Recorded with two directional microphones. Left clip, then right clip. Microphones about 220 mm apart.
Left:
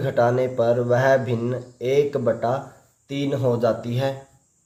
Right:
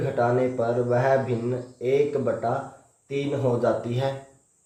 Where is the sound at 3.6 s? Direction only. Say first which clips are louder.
Left 2 dB; 40° left (ahead or behind).